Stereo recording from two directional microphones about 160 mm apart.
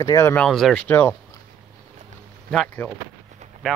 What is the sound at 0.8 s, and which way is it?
Speech, 10° left (ahead or behind).